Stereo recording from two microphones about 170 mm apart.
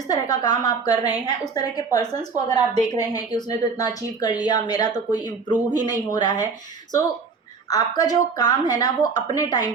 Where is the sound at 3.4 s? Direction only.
25° left (ahead or behind).